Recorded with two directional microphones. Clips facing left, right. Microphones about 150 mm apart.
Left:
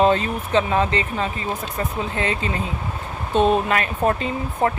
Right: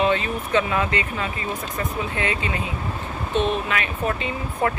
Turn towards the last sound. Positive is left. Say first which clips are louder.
# left 2 dB
turn(degrees=40)  # may be behind; listen again after turning